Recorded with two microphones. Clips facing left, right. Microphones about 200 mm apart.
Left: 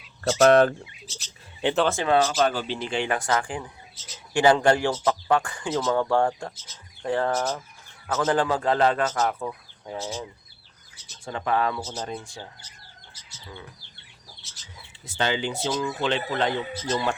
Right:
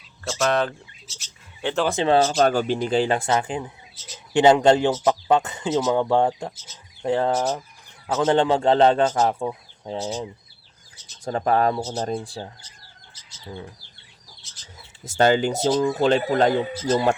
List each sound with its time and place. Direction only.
0.4 s speech: 50° left (ahead or behind)
1.6 s speech: 20° left (ahead or behind)
2.0 s speech: 30° right (ahead or behind)
11.3 s speech: 40° right (ahead or behind)
14.6 s speech: 45° right (ahead or behind)